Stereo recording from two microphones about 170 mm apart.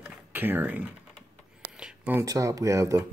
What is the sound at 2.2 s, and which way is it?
Speech, 20° right (ahead or behind).